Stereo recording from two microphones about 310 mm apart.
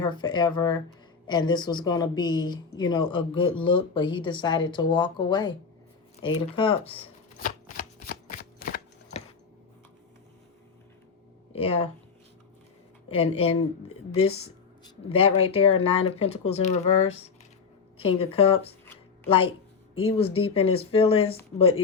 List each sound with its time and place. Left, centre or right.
0.0 s speech: centre
7.4 s shuffling cards: left
11.5 s speech: centre
13.1 s speech: centre
17.9 s a woman's voice: centre
20.0 s speech: centre